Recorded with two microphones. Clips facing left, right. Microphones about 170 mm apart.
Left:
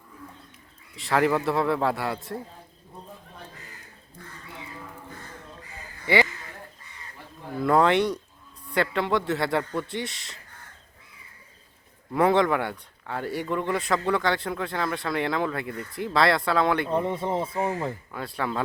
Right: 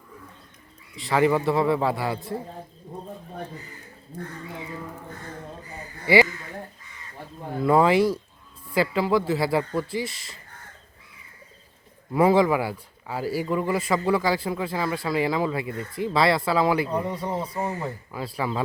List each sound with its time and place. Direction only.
0.9 s a man's voice: centre (ahead or behind)
7.6 s a man's voice: 5° right (ahead or behind)
12.1 s a man's voice: 5° right (ahead or behind)
16.9 s speech: 25° left (ahead or behind)
18.1 s a man's voice: 5° right (ahead or behind)